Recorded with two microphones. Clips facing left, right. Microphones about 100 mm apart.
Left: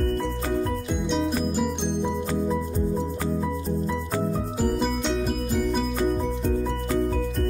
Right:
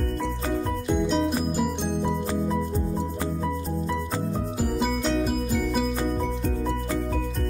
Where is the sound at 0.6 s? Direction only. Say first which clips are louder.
Right 2 dB; centre (ahead or behind).